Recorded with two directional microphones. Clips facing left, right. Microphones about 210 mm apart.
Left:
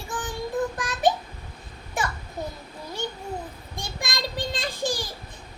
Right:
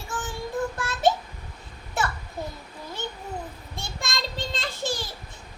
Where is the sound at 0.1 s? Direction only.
15° left (ahead or behind).